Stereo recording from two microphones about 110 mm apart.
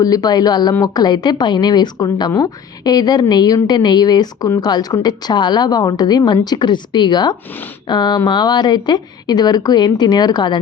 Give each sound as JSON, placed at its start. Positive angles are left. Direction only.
{"t": 0.0, "sound": "a woman's voice", "side_deg": 35}